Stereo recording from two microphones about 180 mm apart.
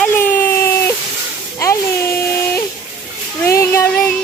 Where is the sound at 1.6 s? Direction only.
15° left (ahead or behind).